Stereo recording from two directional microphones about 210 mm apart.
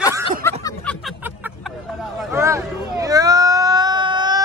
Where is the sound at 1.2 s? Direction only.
10° right (ahead or behind).